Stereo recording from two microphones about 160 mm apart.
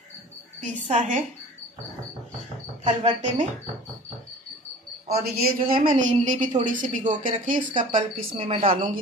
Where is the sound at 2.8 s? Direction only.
45° right (ahead or behind).